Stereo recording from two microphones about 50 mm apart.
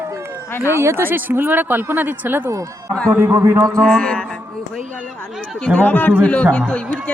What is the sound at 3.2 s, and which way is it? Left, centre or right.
Speech, right.